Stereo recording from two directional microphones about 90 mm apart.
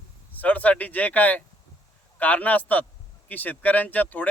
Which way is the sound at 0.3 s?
15° left (ahead or behind).